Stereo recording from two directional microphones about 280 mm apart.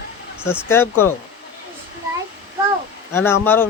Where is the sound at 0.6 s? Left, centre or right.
Centre.